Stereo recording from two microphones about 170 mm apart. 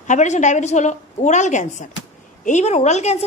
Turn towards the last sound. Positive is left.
turn(degrees=40)  # may be behind; listen again after turning